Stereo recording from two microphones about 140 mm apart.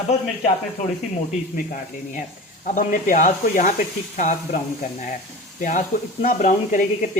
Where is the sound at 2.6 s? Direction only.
70° left (ahead or behind).